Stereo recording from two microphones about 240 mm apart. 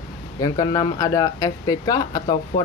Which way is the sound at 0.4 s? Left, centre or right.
Centre.